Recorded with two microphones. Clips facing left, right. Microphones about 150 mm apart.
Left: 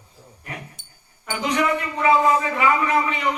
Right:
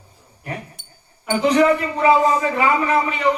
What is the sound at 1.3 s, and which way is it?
A man's voice, 35° right (ahead or behind).